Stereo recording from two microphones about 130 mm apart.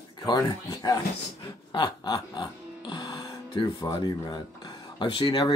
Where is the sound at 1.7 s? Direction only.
30° left (ahead or behind).